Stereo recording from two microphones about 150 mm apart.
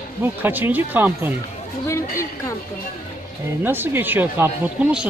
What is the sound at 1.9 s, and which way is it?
Speech, 20° left (ahead or behind).